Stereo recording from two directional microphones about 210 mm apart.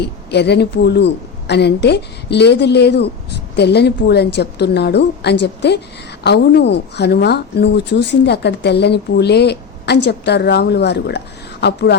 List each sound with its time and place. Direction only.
0.0 s speech: 55° left (ahead or behind)